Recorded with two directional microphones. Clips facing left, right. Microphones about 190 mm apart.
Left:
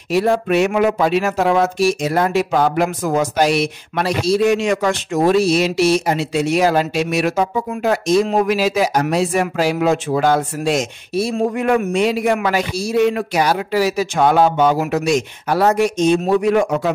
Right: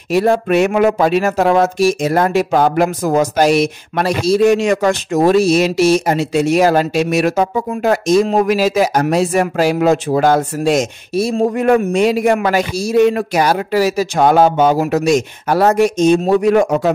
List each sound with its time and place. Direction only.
0.1 s speech: 45° right (ahead or behind)